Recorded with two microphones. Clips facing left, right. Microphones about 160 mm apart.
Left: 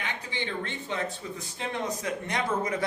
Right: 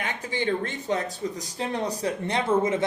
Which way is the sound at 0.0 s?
45° right (ahead or behind).